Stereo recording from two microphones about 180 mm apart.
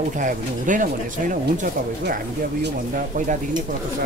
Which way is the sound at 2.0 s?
60° right (ahead or behind).